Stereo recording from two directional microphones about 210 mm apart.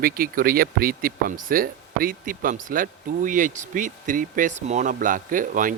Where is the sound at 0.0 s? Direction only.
45° right (ahead or behind).